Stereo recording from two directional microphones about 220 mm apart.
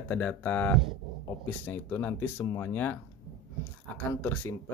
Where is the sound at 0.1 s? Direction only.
5° left (ahead or behind).